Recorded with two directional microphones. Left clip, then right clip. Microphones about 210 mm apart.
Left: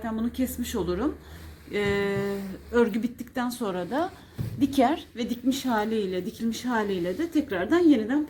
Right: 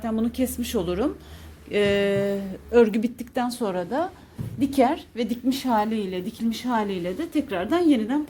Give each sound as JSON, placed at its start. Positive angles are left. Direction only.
{"t": 0.0, "sound": "a woman's voice", "side_deg": -35}